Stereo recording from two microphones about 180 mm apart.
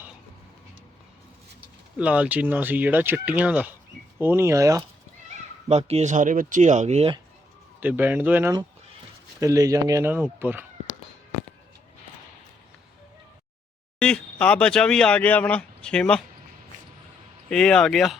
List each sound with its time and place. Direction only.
1.6 s speech: 5° right (ahead or behind)
5.6 s speech: 35° right (ahead or behind)
7.8 s speech: 10° right (ahead or behind)
14.0 s speech: 5° left (ahead or behind)
17.5 s speech: 5° left (ahead or behind)